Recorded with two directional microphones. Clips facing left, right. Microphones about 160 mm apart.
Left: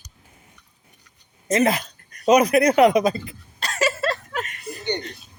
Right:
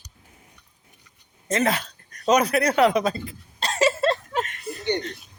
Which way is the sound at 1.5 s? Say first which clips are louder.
Left 3 dB; 10° left (ahead or behind).